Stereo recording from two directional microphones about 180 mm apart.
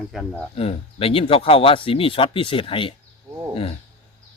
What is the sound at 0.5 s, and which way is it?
Speech, 35° left (ahead or behind).